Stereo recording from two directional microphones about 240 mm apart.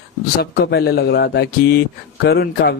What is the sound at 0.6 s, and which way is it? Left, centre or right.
Speech, left.